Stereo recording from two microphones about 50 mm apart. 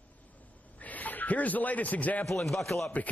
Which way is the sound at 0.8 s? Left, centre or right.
Left.